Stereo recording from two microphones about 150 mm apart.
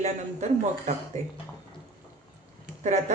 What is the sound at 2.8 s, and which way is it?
Speech, 50° right (ahead or behind).